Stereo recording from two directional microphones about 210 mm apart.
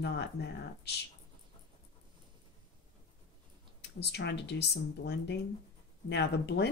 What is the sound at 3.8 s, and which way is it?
Speech, 55° left (ahead or behind).